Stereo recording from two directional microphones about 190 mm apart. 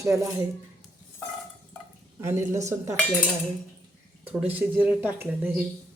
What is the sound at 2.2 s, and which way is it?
Speech, 15° right (ahead or behind).